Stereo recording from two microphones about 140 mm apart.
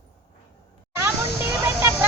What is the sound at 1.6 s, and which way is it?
Vehicle, 20° right (ahead or behind).